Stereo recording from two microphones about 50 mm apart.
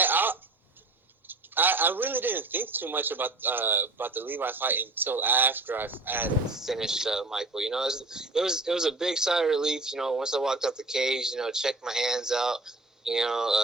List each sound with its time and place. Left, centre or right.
0.0 s a sound: right
1.3 s a man's voice: right
6.7 s a man's voice: centre